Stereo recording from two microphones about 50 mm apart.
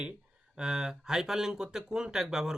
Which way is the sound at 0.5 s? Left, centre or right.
Centre.